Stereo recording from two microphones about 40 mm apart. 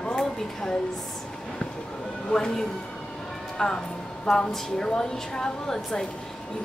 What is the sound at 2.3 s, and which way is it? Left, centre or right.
A woman's voice, centre.